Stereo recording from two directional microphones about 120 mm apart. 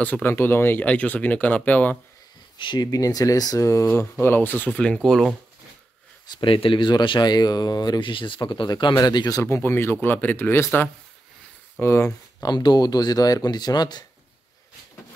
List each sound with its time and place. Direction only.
0.0 s speech: 15° left (ahead or behind)
2.5 s speech: 40° left (ahead or behind); by 5.3 s 5° left (ahead or behind)
6.2 s speech: 40° left (ahead or behind)
9.4 s speech: 20° left (ahead or behind)